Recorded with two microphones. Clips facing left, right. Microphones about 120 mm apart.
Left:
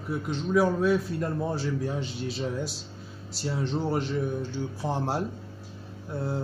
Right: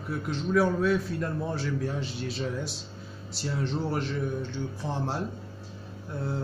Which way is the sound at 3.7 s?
5° left (ahead or behind).